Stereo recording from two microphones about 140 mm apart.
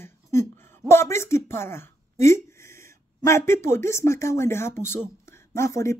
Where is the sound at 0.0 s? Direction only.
20° left (ahead or behind).